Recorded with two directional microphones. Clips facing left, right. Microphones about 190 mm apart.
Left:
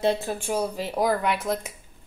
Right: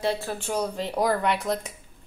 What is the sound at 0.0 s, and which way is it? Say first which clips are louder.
A woman's voice: left 3 dB; 20° left (ahead or behind).